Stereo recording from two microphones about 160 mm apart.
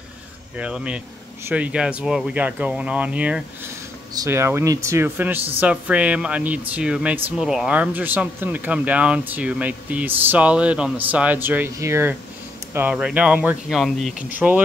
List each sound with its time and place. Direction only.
0.6 s speech: 5° right (ahead or behind)
14.3 s speech: 10° right (ahead or behind)